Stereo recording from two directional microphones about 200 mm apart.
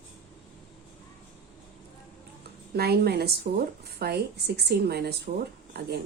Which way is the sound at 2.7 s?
50° right (ahead or behind).